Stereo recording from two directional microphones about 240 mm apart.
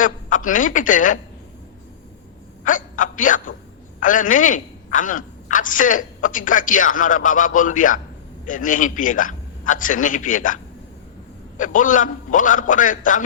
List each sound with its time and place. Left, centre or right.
0.0 s a woman's voice: left
2.6 s a woman's voice: left